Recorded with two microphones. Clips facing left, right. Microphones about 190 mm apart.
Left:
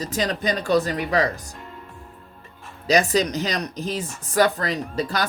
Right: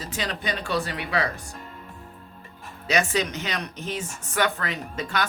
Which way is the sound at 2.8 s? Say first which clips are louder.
Left 5 dB; 35° left (ahead or behind).